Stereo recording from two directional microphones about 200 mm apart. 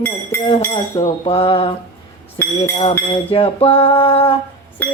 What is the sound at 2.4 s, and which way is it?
Speech, 10° left (ahead or behind).